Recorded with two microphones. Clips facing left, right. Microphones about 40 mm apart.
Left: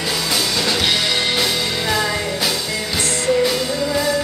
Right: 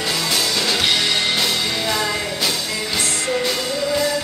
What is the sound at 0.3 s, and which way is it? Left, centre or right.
Music, centre.